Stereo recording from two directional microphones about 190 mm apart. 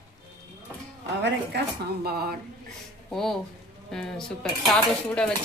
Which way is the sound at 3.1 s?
Centre (ahead or behind).